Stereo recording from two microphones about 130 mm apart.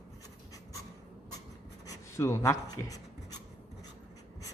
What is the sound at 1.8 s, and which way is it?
Writing, 25° left (ahead or behind).